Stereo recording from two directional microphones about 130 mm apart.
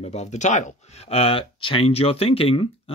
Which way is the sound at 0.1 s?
60° left (ahead or behind).